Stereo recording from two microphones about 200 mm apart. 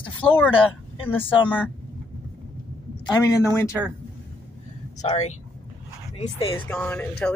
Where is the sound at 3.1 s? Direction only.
15° left (ahead or behind).